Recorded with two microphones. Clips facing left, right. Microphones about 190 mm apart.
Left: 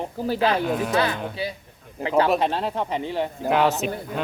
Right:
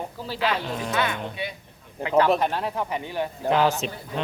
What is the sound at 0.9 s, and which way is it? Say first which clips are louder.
Speech: left 3 dB; 30° left (ahead or behind).